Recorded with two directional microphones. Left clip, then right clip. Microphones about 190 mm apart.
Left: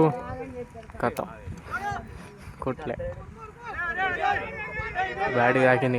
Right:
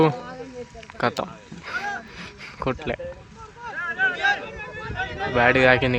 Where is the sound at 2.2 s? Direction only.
10° right (ahead or behind).